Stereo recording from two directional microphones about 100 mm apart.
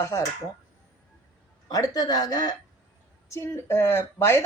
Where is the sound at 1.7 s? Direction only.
40° left (ahead or behind).